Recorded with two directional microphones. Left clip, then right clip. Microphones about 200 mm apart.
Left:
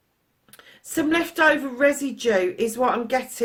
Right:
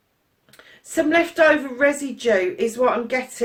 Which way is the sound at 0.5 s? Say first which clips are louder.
Right 4 dB; 50° left (ahead or behind).